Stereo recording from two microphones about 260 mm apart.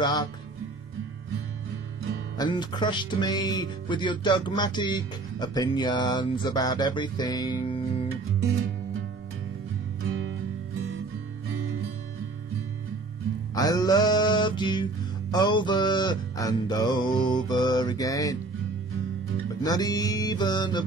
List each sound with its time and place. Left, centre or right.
2.3 s speech: centre
10.0 s music: right
13.6 s music: centre
15.3 s speech: centre
19.6 s speech: centre